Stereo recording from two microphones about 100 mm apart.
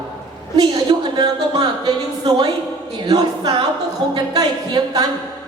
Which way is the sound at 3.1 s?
40° right (ahead or behind).